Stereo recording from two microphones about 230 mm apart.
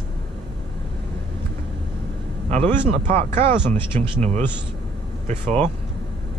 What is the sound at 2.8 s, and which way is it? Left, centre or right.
Speech, right.